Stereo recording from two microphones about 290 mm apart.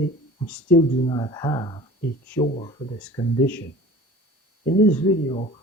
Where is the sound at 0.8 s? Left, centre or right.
Centre.